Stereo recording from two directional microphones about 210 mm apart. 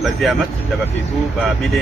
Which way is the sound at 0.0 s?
Centre (ahead or behind).